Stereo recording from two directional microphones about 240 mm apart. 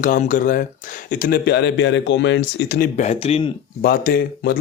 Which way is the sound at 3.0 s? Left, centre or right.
Left.